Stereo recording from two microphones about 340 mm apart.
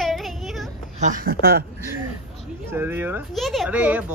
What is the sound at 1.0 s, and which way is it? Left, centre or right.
Speech, right.